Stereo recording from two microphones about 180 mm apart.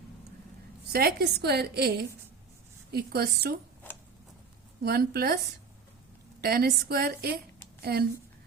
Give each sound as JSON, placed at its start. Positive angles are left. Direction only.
{"t": 0.9, "sound": "a woman's voice", "side_deg": -60}
{"t": 4.8, "sound": "a woman's voice", "side_deg": -60}
{"t": 6.4, "sound": "a woman's voice", "side_deg": -60}